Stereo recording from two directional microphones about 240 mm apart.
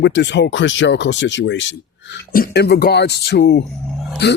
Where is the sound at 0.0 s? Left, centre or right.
Left.